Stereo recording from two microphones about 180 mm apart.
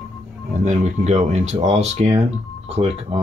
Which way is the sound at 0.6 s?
40° right (ahead or behind).